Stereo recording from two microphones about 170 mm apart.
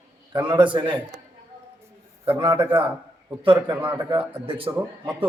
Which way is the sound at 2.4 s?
30° right (ahead or behind).